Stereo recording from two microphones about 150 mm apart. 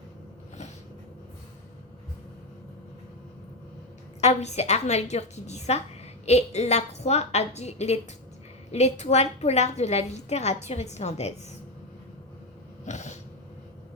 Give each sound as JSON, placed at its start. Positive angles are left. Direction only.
{"t": 4.2, "sound": "a woman's voice", "side_deg": 45}
{"t": 12.8, "sound": "throat clearing", "side_deg": 50}